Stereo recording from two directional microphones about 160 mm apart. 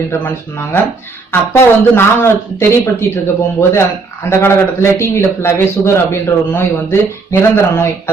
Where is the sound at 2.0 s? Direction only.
15° left (ahead or behind).